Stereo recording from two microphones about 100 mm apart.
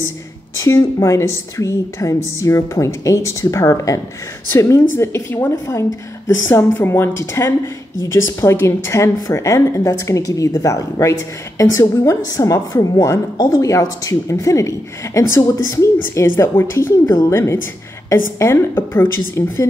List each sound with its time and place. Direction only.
0.6 s a woman's voice: 30° left (ahead or behind)